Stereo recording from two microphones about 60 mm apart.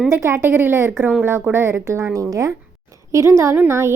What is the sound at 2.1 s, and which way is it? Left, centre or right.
Speech, right.